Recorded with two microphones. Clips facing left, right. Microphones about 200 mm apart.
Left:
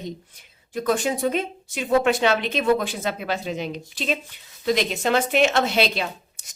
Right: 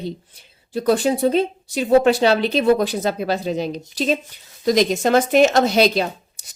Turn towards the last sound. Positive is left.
turn(degrees=-40)  # may be behind; listen again after turning